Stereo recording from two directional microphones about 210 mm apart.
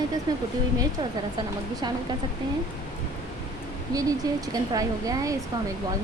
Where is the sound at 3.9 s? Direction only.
15° right (ahead or behind).